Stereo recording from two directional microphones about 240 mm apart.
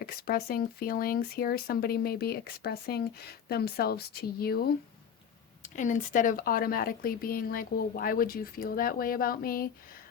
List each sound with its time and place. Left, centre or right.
0.0 s speech: left